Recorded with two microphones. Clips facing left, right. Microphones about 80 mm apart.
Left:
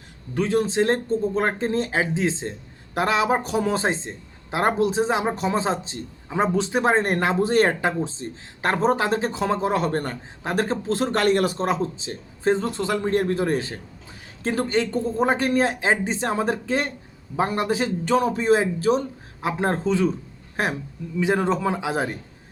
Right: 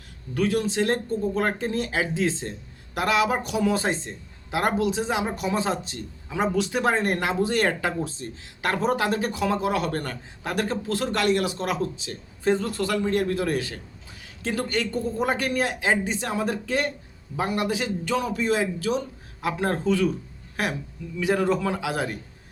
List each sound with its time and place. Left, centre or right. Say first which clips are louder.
0.3 s speech: left 3 dB; left
11.6 s speech: left 3 dB; left